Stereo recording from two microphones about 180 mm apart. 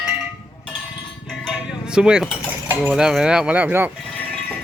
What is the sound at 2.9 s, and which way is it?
Speech, centre (ahead or behind).